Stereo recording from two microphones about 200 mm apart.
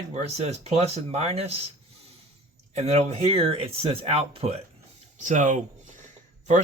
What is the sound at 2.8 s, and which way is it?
Speech, 35° right (ahead or behind).